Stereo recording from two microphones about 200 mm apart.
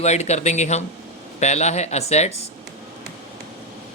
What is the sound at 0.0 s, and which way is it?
Speech, 35° left (ahead or behind).